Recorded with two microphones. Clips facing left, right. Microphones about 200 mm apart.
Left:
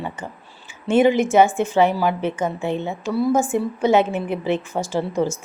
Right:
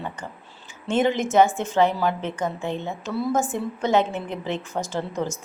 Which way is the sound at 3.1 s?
Centre (ahead or behind).